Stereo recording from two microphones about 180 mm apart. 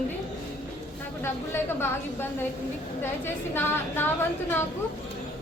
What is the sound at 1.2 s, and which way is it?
Speech, 10° left (ahead or behind).